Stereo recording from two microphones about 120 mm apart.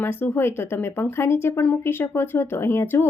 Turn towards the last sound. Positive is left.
turn(degrees=20)  # may be behind; listen again after turning